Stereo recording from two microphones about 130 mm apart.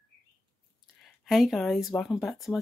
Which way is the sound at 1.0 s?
Centre (ahead or behind).